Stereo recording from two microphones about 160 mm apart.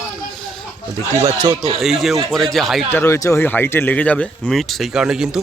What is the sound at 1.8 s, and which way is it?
Speech, centre (ahead or behind).